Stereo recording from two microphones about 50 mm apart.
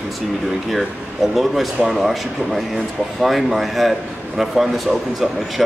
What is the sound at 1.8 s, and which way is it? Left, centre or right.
Speech, centre.